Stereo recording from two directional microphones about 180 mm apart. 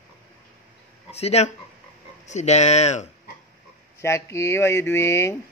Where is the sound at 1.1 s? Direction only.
35° left (ahead or behind).